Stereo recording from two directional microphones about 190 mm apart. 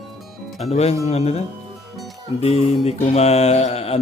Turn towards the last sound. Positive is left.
turn(degrees=30)  # may be behind; listen again after turning